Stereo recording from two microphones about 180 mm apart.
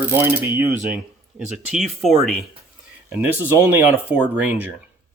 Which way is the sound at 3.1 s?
10° right (ahead or behind).